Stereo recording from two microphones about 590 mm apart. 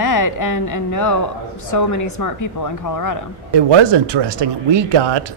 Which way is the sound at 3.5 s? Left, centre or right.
Right.